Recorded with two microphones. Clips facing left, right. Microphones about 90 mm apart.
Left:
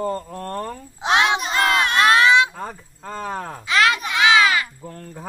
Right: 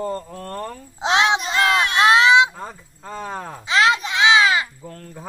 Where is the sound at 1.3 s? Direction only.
45° left (ahead or behind).